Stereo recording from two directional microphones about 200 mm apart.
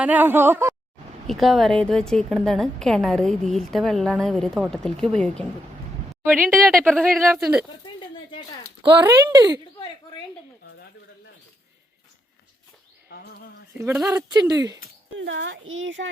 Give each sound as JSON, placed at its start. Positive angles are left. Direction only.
{"t": 0.0, "sound": "speech", "side_deg": -10}
{"t": 1.3, "sound": "a woman's voice", "side_deg": 0}
{"t": 7.9, "sound": "a sound", "side_deg": 25}
{"t": 8.8, "sound": "speech", "side_deg": -20}
{"t": 13.1, "sound": "a sound", "side_deg": 55}
{"t": 14.3, "sound": "speech", "side_deg": -20}
{"t": 15.2, "sound": "a child's voice", "side_deg": -65}